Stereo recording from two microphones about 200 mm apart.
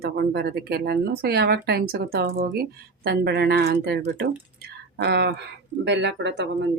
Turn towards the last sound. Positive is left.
turn(degrees=-65)  # may be behind; listen again after turning